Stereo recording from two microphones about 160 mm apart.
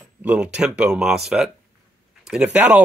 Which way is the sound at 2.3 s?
5° right (ahead or behind).